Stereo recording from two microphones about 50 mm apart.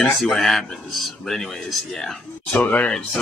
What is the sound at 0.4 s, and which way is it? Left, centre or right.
Speech, centre.